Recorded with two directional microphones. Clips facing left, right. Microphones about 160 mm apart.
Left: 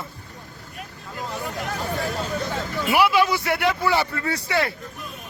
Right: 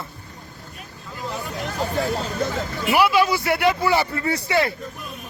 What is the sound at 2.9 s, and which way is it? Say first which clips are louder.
A man's voice: right 1 dB; centre (ahead or behind).